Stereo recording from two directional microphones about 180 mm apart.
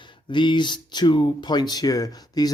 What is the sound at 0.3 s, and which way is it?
Speech, 25° left (ahead or behind).